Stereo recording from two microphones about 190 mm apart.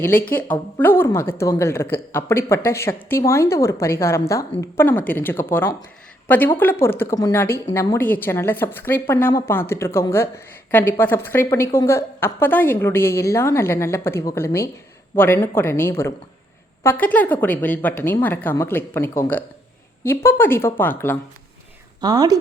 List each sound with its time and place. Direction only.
0.0 s a woman's voice: 10° left (ahead or behind)
22.0 s speech: 20° right (ahead or behind)